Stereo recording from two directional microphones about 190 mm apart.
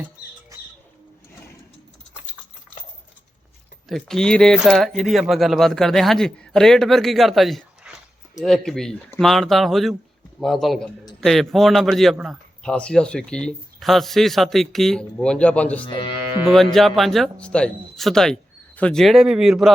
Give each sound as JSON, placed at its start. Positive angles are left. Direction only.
{"t": 0.5, "sound": "bird", "side_deg": -15}
{"t": 3.8, "sound": "speech", "side_deg": 0}
{"t": 15.9, "sound": "speech", "side_deg": 25}
{"t": 16.7, "sound": "speech", "side_deg": 0}